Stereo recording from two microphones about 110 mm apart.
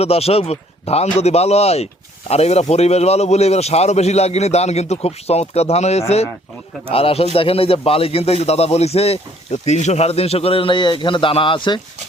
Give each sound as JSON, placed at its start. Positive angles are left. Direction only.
{"t": 0.0, "sound": "speech", "side_deg": 65}
{"t": 6.9, "sound": "a man's voice", "side_deg": 60}